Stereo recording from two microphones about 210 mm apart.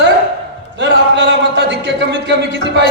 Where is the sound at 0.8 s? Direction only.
60° right (ahead or behind).